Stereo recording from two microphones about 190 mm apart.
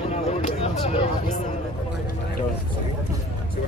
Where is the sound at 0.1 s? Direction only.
35° left (ahead or behind).